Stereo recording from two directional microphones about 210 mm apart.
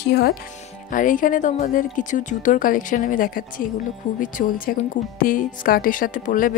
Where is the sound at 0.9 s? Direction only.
40° left (ahead or behind).